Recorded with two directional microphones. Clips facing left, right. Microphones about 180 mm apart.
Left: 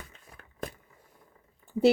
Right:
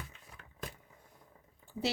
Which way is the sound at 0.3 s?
50° left (ahead or behind).